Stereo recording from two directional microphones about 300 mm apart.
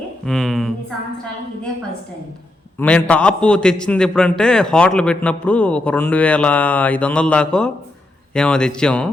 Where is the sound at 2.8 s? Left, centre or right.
Centre.